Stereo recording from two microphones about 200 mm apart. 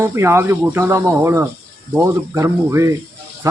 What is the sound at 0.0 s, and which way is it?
Speech, 10° right (ahead or behind).